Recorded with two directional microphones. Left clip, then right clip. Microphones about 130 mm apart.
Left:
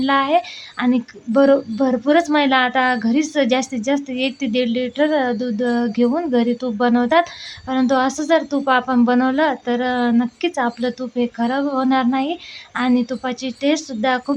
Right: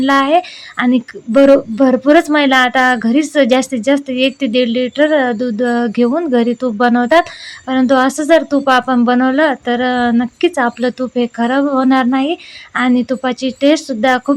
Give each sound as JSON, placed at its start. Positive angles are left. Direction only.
{"t": 0.0, "sound": "speech", "side_deg": -35}